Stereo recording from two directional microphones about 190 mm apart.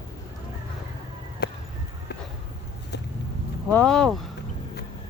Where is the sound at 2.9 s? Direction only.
65° left (ahead or behind).